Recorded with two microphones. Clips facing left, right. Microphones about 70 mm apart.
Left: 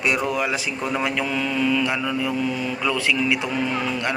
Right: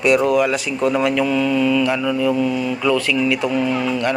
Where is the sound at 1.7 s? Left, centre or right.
Centre.